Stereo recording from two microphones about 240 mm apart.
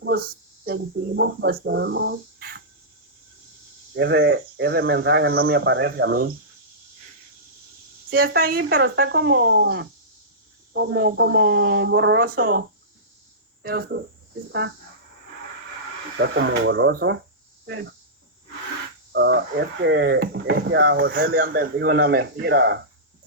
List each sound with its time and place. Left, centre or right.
0.0 s speech: right
3.9 s speech: right
8.1 s speech: right
16.2 s speech: right
19.1 s speech: right